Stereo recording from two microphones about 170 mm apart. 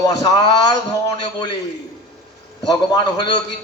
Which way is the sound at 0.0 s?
20° left (ahead or behind).